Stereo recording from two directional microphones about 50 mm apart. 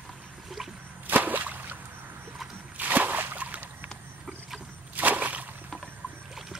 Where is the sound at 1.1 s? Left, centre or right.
Right.